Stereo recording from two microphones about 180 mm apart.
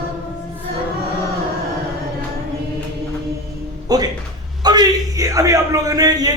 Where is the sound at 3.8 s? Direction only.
20° right (ahead or behind).